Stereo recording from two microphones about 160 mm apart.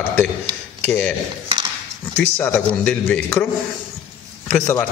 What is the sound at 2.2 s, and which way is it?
A man's voice, 10° left (ahead or behind).